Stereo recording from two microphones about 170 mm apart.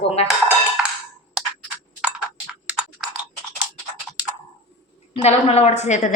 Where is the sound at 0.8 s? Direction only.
5° right (ahead or behind).